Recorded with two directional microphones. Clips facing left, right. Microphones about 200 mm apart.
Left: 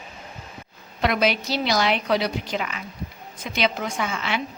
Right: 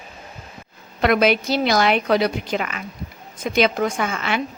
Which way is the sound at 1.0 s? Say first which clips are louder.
Right 5 dB; 55° right (ahead or behind).